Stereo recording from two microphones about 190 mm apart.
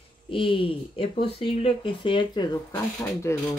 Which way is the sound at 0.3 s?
25° left (ahead or behind).